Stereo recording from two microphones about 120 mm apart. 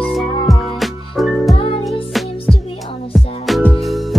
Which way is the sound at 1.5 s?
50° left (ahead or behind).